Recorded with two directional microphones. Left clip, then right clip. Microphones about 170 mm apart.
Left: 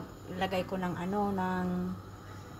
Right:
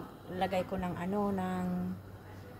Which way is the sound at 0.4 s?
30° left (ahead or behind).